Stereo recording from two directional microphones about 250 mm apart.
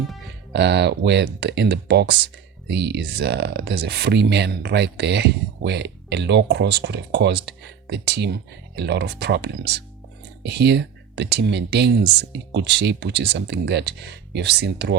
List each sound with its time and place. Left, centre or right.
0.5 s speech: right